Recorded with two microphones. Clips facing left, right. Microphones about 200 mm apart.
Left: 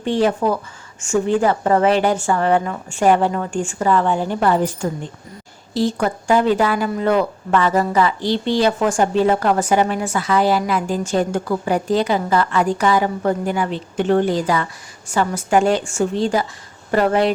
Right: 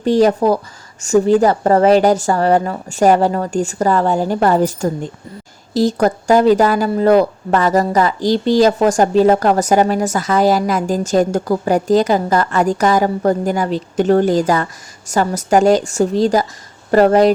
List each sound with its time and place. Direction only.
0.0 s speech: 40° right (ahead or behind)